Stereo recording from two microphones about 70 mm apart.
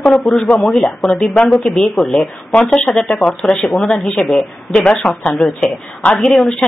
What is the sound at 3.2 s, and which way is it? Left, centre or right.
Speech, centre.